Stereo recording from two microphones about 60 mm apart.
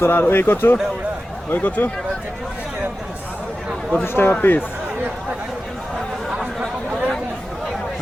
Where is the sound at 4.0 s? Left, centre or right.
Left.